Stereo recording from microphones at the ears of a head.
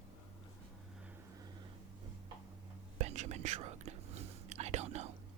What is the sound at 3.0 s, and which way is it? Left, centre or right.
Whispering, right.